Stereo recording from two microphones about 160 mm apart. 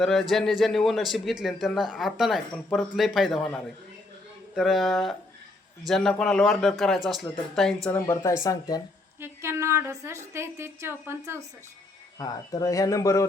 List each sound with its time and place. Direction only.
0.0 s a man's voice: centre (ahead or behind)
7.9 s speech: 15° left (ahead or behind)
9.2 s a woman's voice: 15° right (ahead or behind)
12.2 s speech: 20° left (ahead or behind)